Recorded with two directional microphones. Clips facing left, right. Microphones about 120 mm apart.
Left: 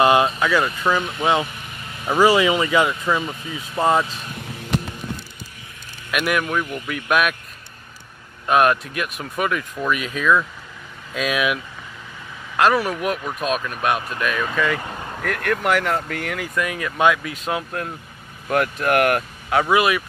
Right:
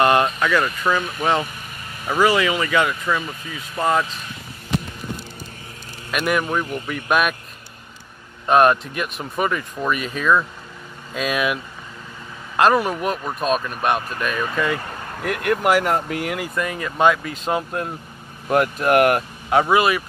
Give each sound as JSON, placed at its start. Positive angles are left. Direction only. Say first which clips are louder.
{"t": 0.0, "sound": "vehicle", "louder": "left 1 dB", "side_deg": 10}
{"t": 0.4, "sound": "speech", "louder": "even", "side_deg": 5}
{"t": 0.9, "sound": "speech", "louder": "left 1 dB", "side_deg": 20}
{"t": 6.1, "sound": "speech", "louder": "even", "side_deg": 0}
{"t": 6.4, "sound": "speech", "louder": "right 1 dB", "side_deg": -25}
{"t": 6.9, "sound": "speech", "louder": "even", "side_deg": 0}
{"t": 8.5, "sound": "speech", "louder": "right 2 dB", "side_deg": 0}
{"t": 12.7, "sound": "speech", "louder": "right 2 dB", "side_deg": -15}
{"t": 13.0, "sound": "speech", "louder": "right 1 dB", "side_deg": 0}
{"t": 14.8, "sound": "vehicle", "louder": "left 1 dB", "side_deg": 15}
{"t": 15.1, "sound": "speech", "louder": "right 2 dB", "side_deg": -5}
{"t": 19.7, "sound": "speech", "louder": "left 1 dB", "side_deg": 5}